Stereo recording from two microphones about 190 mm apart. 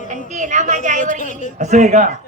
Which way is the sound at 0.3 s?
40° right (ahead or behind).